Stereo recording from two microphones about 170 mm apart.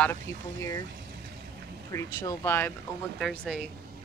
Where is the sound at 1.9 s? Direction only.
15° left (ahead or behind).